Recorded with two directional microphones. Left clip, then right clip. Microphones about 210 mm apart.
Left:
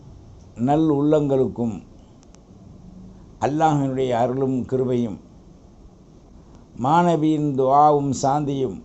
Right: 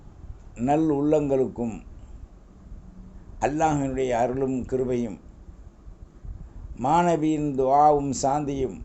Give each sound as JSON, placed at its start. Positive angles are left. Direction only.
{"t": 0.5, "sound": "speech", "side_deg": -20}
{"t": 3.4, "sound": "speech", "side_deg": -20}
{"t": 6.7, "sound": "speech", "side_deg": -20}